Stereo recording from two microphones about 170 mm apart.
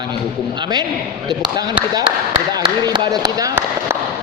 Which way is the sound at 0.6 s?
25° right (ahead or behind).